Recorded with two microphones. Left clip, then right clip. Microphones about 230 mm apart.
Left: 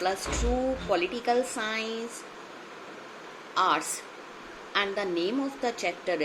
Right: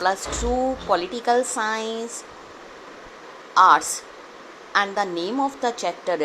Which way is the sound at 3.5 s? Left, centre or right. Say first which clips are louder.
Right 11 dB; centre.